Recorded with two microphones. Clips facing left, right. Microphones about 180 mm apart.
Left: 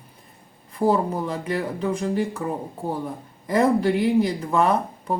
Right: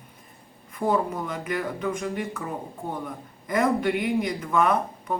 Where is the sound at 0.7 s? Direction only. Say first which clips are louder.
Left 4 dB; 30° left (ahead or behind).